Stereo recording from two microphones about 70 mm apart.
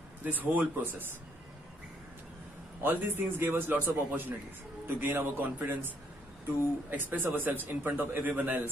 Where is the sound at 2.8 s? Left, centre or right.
Right.